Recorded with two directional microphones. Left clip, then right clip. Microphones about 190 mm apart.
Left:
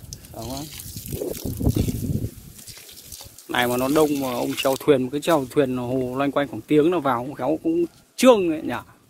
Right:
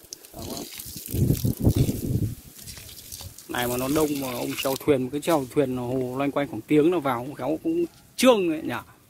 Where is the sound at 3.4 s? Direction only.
15° left (ahead or behind).